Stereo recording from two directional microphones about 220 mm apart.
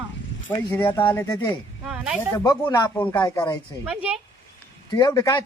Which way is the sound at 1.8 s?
5° right (ahead or behind).